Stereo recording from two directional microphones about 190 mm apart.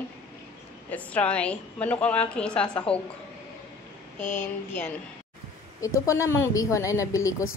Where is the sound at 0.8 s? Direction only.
10° left (ahead or behind).